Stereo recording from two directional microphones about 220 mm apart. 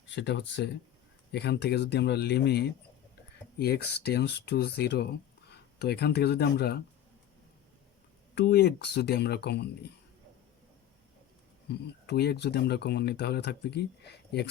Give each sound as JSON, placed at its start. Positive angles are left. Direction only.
{"t": 0.1, "sound": "speech", "side_deg": 55}
{"t": 8.4, "sound": "speech", "side_deg": 50}
{"t": 11.7, "sound": "speech", "side_deg": 50}